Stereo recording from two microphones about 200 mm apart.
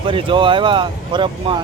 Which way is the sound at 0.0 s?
25° right (ahead or behind).